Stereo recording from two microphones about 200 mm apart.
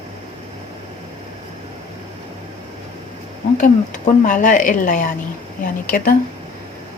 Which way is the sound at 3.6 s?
40° left (ahead or behind).